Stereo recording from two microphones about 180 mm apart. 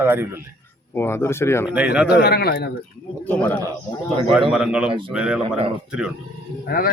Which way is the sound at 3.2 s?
10° left (ahead or behind).